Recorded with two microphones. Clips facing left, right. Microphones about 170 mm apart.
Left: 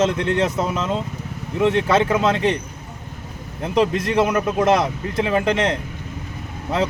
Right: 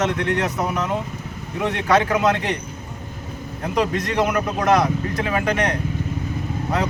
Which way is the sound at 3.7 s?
25° left (ahead or behind).